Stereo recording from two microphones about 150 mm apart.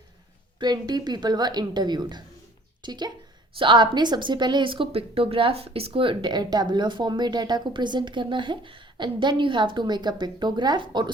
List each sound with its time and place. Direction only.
0.6 s a woman's voice: 30° right (ahead or behind)